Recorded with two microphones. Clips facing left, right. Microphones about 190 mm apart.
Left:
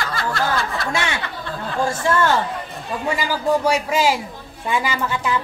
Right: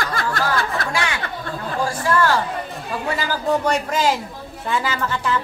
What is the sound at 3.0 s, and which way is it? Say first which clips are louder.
Speech: left 2 dB; 10° left (ahead or behind).